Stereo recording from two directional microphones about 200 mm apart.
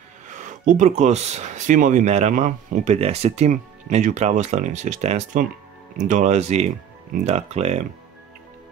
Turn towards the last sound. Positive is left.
turn(degrees=-35)  # may be behind; listen again after turning